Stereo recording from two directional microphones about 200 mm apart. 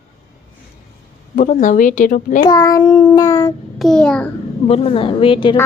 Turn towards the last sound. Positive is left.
turn(degrees=25)  # may be behind; listen again after turning